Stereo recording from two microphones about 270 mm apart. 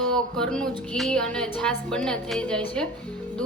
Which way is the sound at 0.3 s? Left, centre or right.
Centre.